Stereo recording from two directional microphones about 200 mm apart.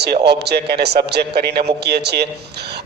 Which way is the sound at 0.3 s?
55° right (ahead or behind).